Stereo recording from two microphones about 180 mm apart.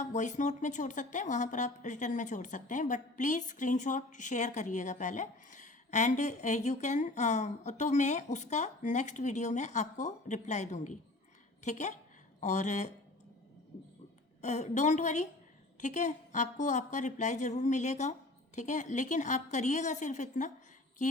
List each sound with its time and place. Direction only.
0.0 s a woman's voice: 40° left (ahead or behind)
14.4 s a woman's voice: 40° left (ahead or behind)